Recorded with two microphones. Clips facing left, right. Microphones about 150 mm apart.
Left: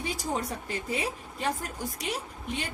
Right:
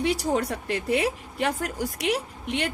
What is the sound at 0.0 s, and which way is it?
A woman's voice, 70° right (ahead or behind).